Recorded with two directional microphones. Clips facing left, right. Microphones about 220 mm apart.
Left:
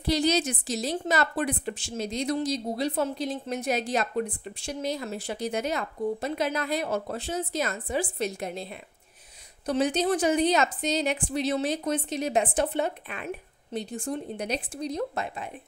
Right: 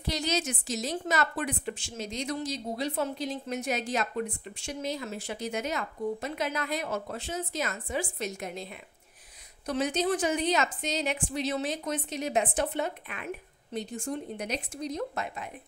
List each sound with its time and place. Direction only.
0.0 s a woman's voice: 35° left (ahead or behind)